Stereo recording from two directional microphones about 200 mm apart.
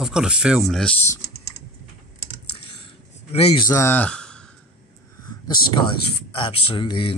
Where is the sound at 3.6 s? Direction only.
15° left (ahead or behind).